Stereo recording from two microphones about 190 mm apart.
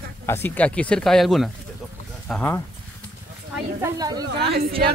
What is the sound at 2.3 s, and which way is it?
Speech, 10° left (ahead or behind).